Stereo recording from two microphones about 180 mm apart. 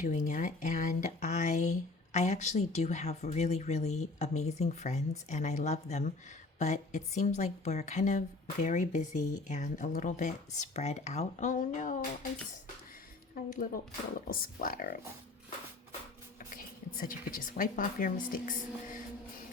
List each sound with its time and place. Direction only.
0.0 s a sound: 45° left (ahead or behind)
2.1 s speech: 40° left (ahead or behind)
13.5 s speech: 50° left (ahead or behind)
16.4 s a woman's voice: 50° left (ahead or behind)